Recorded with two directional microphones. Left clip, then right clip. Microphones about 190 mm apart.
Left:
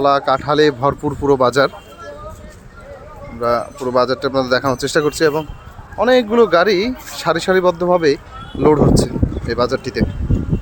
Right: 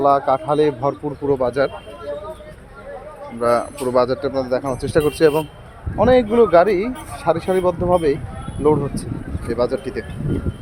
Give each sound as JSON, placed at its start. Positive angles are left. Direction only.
{"t": 0.0, "sound": "speech", "side_deg": 10}
{"t": 3.4, "sound": "speech", "side_deg": 0}
{"t": 9.5, "sound": "speech", "side_deg": 10}